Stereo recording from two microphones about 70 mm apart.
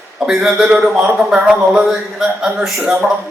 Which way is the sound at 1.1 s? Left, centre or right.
Centre.